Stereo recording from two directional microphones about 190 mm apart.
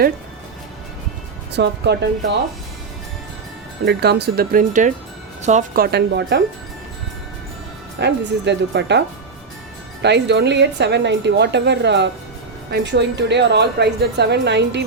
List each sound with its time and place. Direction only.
1.5 s speech: 65° right (ahead or behind)
3.8 s speech: 60° right (ahead or behind)
7.9 s speech: 65° right (ahead or behind)